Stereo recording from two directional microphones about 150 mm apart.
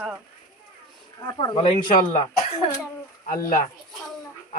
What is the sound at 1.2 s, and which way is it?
Speech, 30° left (ahead or behind).